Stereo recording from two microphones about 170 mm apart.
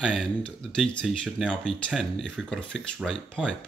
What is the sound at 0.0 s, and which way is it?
Speech, centre (ahead or behind).